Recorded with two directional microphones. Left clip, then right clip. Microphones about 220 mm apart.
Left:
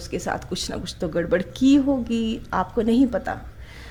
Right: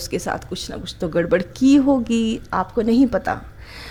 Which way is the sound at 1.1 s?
10° right (ahead or behind).